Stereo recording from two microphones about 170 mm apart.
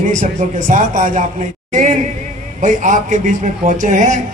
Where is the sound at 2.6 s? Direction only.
45° right (ahead or behind).